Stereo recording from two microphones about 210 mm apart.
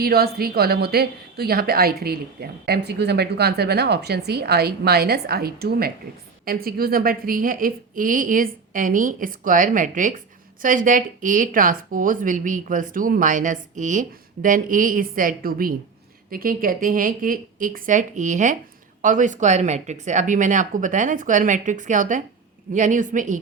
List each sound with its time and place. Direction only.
0.0 s speech: 45° right (ahead or behind)